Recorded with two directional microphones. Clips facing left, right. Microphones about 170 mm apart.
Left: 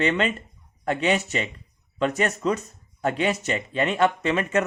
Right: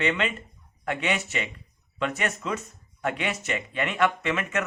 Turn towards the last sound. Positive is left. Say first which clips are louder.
# left 5 dB
turn(degrees=35)  # may be behind; listen again after turning